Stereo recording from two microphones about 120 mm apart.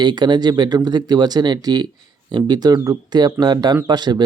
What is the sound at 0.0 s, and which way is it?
Speech, 35° right (ahead or behind).